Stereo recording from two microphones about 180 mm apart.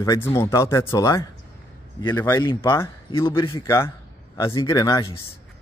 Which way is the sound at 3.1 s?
30° left (ahead or behind).